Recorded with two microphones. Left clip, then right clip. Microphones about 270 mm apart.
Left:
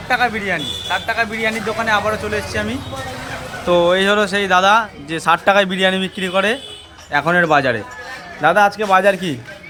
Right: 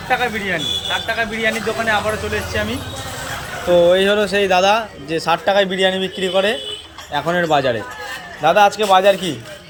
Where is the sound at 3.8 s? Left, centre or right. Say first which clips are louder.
Right 1 dB; centre.